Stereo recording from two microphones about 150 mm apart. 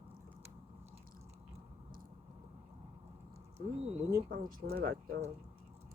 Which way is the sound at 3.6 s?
45° right (ahead or behind).